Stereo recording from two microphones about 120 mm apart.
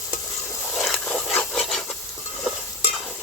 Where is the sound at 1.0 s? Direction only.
15° left (ahead or behind).